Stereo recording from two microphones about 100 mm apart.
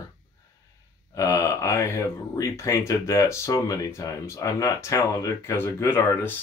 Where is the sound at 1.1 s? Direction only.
30° left (ahead or behind).